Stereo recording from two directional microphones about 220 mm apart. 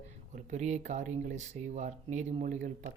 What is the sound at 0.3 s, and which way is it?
Speech, 30° right (ahead or behind).